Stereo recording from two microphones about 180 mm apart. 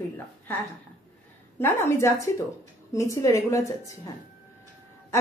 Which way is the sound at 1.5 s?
15° left (ahead or behind).